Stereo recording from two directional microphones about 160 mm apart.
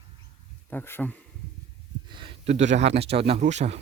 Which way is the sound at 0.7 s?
15° left (ahead or behind).